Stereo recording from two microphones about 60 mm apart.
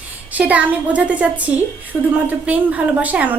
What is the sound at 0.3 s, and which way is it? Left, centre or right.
A woman's voice, right.